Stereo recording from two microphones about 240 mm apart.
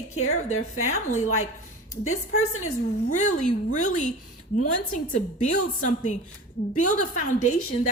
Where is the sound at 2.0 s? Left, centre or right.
Left.